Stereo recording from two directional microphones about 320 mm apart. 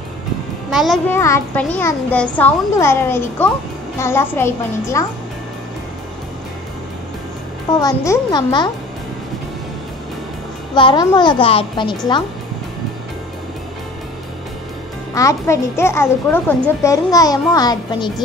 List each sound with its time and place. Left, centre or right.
0.7 s a child's voice: centre
7.8 s a child's voice: centre
10.7 s a child's voice: centre
15.1 s a child's voice: centre